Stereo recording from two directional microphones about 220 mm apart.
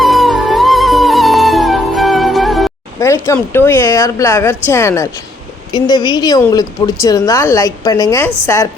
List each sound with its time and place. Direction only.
0.0 s music: centre (ahead or behind)
3.0 s speech: 10° left (ahead or behind)